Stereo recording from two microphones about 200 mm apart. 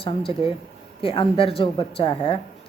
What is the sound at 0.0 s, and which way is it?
Speech, 25° left (ahead or behind).